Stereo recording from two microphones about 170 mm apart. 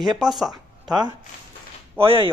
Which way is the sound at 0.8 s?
25° right (ahead or behind).